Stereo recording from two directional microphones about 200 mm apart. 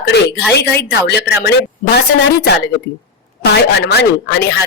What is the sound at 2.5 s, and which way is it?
Speech, 55° left (ahead or behind).